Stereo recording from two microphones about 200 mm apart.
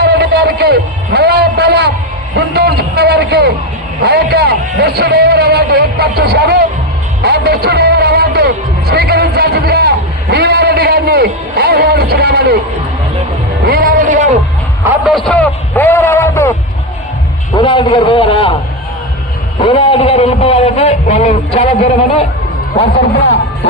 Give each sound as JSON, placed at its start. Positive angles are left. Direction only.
{"t": 0.0, "sound": "a sound", "side_deg": -55}
{"t": 4.0, "sound": "a man's voice", "side_deg": -55}
{"t": 7.2, "sound": "music", "side_deg": -55}
{"t": 13.7, "sound": "music", "side_deg": -45}
{"t": 14.8, "sound": "a sound", "side_deg": 0}
{"t": 17.6, "sound": "a man's voice", "side_deg": 25}
{"t": 19.6, "sound": "a man's voice", "side_deg": 25}